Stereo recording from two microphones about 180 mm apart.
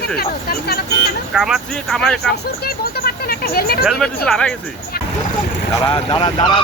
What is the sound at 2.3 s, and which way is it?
Speech, 60° left (ahead or behind).